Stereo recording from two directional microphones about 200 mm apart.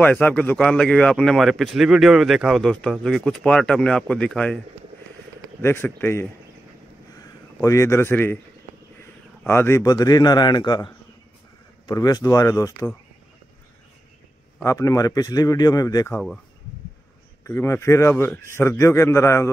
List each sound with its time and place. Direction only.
0.0 s speech: 5° left (ahead or behind)
5.6 s a man's voice: 10° left (ahead or behind)
9.4 s a man's voice: 10° left (ahead or behind)
14.6 s a man's voice: 15° left (ahead or behind)
16.1 s speech: 5° left (ahead or behind)
17.4 s a man's voice: 15° left (ahead or behind)